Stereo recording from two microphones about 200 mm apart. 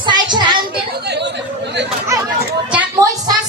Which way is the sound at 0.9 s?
55° right (ahead or behind).